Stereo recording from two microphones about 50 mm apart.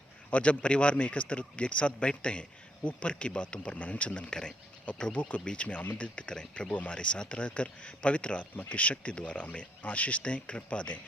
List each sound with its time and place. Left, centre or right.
0.3 s speech: left